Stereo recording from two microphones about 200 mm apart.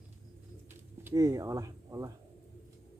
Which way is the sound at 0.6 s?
10° right (ahead or behind).